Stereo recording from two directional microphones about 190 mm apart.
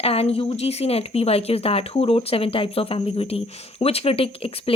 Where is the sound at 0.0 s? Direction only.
30° left (ahead or behind).